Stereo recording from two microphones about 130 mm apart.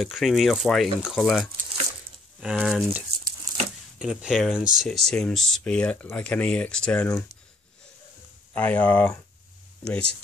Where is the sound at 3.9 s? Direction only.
5° right (ahead or behind).